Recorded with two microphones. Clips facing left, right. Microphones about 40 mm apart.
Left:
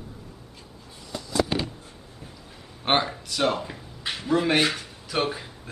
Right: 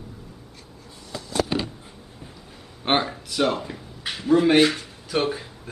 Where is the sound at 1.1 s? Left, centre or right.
Right.